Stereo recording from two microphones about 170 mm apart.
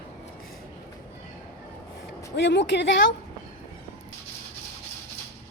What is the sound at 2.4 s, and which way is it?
Speech, 90° left.